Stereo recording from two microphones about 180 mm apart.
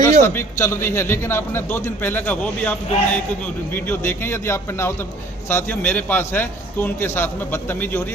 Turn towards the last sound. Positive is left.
turn(degrees=15)  # may be behind; listen again after turning